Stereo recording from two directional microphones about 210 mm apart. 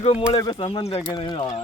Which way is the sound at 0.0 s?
30° left (ahead or behind).